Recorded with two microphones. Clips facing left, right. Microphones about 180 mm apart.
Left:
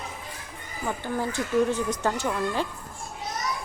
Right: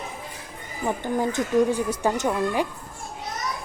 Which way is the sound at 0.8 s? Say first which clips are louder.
Right 4 dB; 20° right (ahead or behind).